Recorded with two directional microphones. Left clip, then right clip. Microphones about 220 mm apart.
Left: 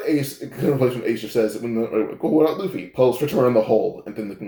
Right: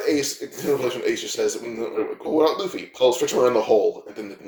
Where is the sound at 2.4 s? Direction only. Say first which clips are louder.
Even; 45° right (ahead or behind).